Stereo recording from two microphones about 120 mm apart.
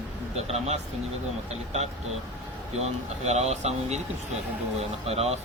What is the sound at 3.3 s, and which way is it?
Speech, 70° right (ahead or behind).